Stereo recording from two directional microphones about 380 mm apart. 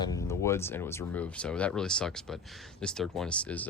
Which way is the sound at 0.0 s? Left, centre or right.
Centre.